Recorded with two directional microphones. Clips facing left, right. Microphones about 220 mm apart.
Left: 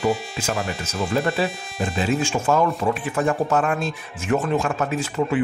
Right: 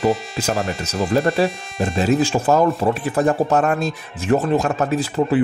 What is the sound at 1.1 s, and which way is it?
Speech, 40° right (ahead or behind).